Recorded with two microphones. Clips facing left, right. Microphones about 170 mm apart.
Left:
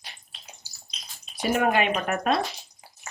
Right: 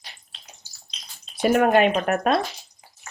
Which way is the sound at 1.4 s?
50° right (ahead or behind).